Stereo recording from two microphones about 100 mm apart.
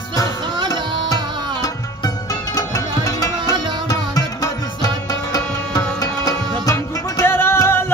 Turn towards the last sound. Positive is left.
turn(degrees=25)  # may be behind; listen again after turning